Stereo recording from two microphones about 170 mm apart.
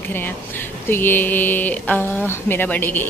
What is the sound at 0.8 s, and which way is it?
Speech, 10° left (ahead or behind).